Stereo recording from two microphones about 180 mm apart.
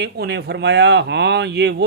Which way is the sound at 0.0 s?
65° right (ahead or behind).